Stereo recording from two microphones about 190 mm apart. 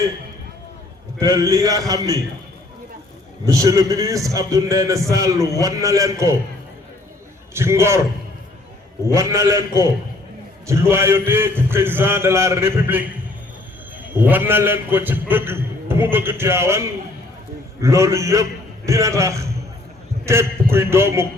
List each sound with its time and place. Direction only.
1.2 s a man's voice: 15° right (ahead or behind)
3.4 s a man's voice: 15° right (ahead or behind)
7.5 s a man's voice: 15° right (ahead or behind)
9.0 s a man's voice: 15° right (ahead or behind)
10.7 s a man's voice: 15° right (ahead or behind)
14.1 s a man's voice: 10° right (ahead or behind)